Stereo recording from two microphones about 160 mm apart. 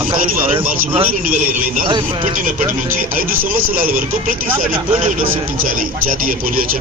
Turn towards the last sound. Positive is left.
turn(degrees=-60)  # may be behind; listen again after turning